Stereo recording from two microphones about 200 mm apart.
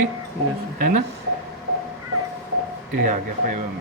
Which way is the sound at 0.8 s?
45° right (ahead or behind).